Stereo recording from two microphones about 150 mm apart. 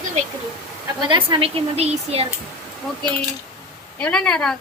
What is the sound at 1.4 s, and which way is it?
Speech, 40° right (ahead or behind).